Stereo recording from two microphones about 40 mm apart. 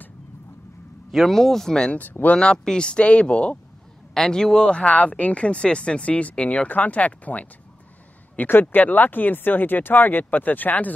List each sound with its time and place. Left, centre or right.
1.1 s speech: centre
2.0 s speech: left
2.3 s speech: left
4.1 s speech: centre
6.7 s speech: left